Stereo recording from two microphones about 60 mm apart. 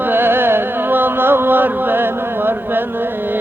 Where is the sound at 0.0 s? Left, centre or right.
Right.